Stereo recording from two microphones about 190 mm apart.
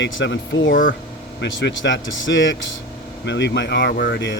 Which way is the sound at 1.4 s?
75° left (ahead or behind).